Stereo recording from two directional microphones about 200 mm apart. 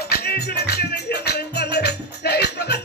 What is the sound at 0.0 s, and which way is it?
Music, 50° left (ahead or behind).